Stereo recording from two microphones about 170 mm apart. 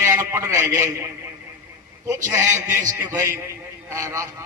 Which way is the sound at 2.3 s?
15° right (ahead or behind).